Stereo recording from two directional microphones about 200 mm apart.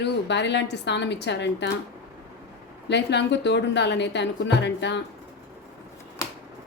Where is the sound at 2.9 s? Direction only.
60° left (ahead or behind).